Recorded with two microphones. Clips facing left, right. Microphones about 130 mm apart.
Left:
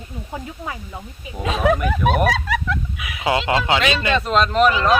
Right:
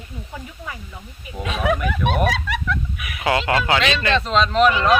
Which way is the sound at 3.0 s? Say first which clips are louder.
Even; 20° left (ahead or behind).